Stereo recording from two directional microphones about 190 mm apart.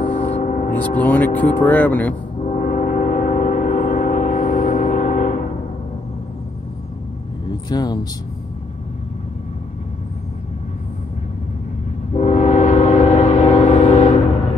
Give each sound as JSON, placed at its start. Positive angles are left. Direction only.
{"t": 0.0, "sound": "gong", "side_deg": 45}
{"t": 0.8, "sound": "speech", "side_deg": 10}
{"t": 2.4, "sound": "gong", "side_deg": 45}
{"t": 7.7, "sound": "speech", "side_deg": 20}
{"t": 12.1, "sound": "train", "side_deg": 35}